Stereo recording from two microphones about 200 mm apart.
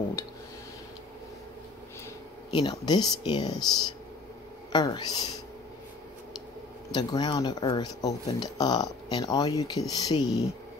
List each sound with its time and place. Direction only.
0.2 s speech: 15° left (ahead or behind)
2.5 s speech: 20° left (ahead or behind)
4.7 s speech: 20° left (ahead or behind)
6.9 s speech: 20° left (ahead or behind)